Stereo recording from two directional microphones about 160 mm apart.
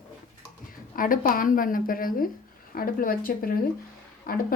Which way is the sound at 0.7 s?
60° left (ahead or behind).